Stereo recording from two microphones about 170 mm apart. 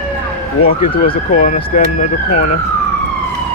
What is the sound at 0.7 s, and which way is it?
Speech, 55° left (ahead or behind).